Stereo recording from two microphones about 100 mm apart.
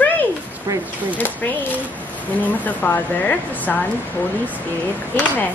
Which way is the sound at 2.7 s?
20° left (ahead or behind).